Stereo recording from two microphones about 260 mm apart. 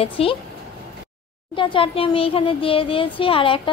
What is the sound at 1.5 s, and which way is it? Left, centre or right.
A woman's voice, centre.